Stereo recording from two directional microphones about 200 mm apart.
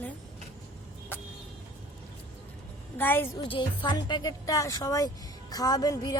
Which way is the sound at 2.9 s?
10° left (ahead or behind).